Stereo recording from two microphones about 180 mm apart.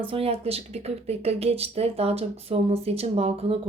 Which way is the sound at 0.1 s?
30° right (ahead or behind).